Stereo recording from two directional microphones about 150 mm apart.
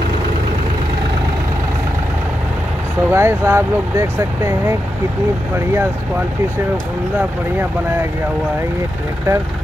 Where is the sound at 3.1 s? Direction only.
15° right (ahead or behind).